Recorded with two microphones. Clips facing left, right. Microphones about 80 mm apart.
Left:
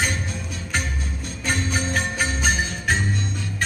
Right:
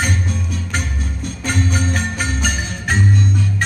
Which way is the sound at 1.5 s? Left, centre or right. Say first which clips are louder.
Right 3 dB; left.